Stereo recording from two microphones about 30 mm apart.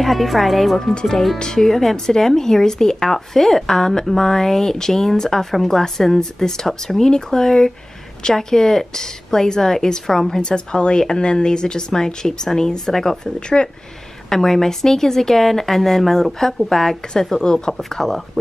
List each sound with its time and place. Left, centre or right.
0.0 s speech: centre
10.4 s speech: left; by 13.2 s centre
13.2 s speech: left
14.3 s speech: centre
17.4 s speech: left
17.7 s speech: centre